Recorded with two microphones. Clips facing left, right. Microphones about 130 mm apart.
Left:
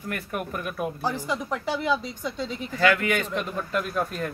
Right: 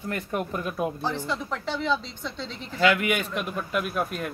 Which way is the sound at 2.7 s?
15° right (ahead or behind).